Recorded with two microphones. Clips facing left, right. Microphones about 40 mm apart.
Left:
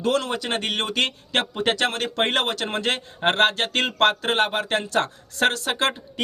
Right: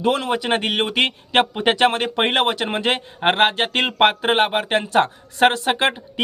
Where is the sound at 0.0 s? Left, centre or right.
Right.